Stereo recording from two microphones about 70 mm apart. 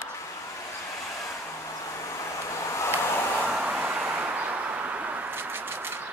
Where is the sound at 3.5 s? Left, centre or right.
Centre.